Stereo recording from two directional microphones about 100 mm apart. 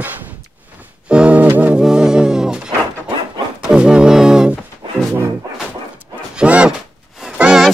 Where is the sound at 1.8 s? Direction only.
5° right (ahead or behind).